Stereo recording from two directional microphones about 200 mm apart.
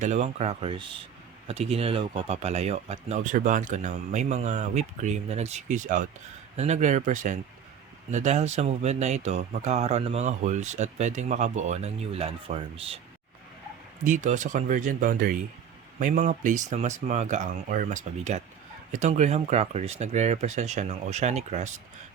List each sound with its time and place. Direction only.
0.0 s speech: 35° right (ahead or behind)
14.0 s speech: 40° right (ahead or behind)